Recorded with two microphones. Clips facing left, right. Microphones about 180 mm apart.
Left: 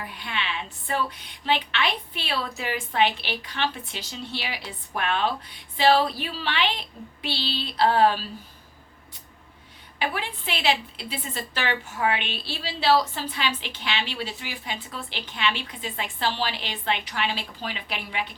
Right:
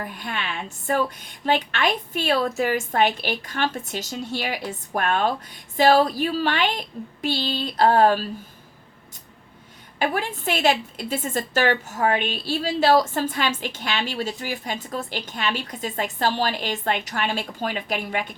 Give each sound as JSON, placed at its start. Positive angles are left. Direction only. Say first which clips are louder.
{"t": 0.0, "sound": "a woman's voice", "louder": "right 2 dB", "side_deg": -45}
{"t": 10.0, "sound": "a woman's voice", "louder": "right 5 dB", "side_deg": -45}